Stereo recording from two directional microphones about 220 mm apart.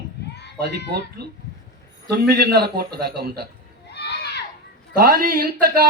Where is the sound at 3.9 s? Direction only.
50° left (ahead or behind).